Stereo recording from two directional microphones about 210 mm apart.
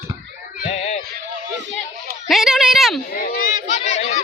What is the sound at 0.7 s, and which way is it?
Music, 30° left (ahead or behind).